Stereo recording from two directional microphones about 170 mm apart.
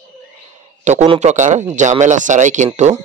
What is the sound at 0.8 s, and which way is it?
A man's voice, 45° right (ahead or behind).